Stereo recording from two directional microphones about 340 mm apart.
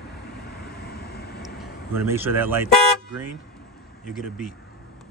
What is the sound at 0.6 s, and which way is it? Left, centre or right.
Vehicle, left.